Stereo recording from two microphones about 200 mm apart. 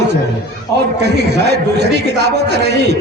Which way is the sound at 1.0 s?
55° right (ahead or behind).